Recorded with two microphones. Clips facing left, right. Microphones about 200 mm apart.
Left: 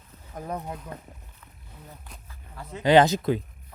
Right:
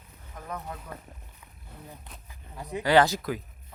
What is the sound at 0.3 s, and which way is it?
Speech, 30° left (ahead or behind).